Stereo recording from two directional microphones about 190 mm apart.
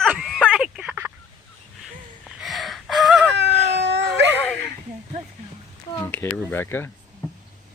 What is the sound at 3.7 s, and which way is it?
Dog, 65° right (ahead or behind).